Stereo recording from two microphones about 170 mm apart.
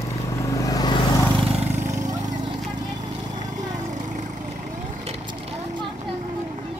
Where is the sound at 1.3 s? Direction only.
40° right (ahead or behind).